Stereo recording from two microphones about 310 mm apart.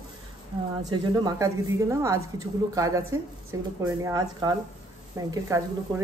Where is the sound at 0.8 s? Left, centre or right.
Centre.